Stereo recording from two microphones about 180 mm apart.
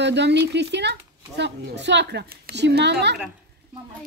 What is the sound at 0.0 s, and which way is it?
Speech, 75° right (ahead or behind).